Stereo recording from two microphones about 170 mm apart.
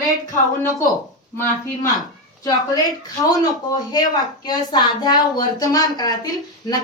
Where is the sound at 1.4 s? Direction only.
20° left (ahead or behind).